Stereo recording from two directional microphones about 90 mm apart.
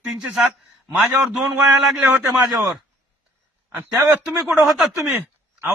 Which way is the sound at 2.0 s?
20° right (ahead or behind).